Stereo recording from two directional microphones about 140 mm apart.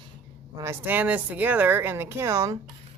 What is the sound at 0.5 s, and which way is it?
Speech, 20° right (ahead or behind).